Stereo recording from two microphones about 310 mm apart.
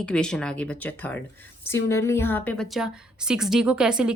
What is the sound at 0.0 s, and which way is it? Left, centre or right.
Speech, centre.